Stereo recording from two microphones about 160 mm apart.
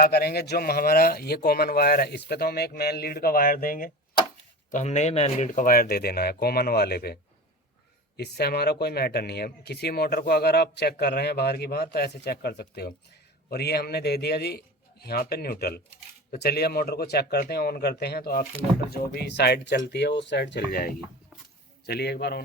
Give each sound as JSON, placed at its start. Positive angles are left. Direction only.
{"t": 0.0, "sound": "speech", "side_deg": 75}
{"t": 4.7, "sound": "speech", "side_deg": 45}
{"t": 8.1, "sound": "speech", "side_deg": 90}
{"t": 15.0, "sound": "speech", "side_deg": 75}
{"t": 18.9, "sound": "speech", "side_deg": 90}
{"t": 21.8, "sound": "speech", "side_deg": 90}